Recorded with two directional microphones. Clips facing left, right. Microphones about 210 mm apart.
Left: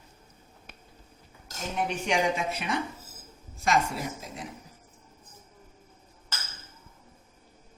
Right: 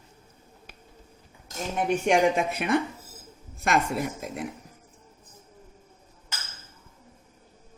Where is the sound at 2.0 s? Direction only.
55° right (ahead or behind).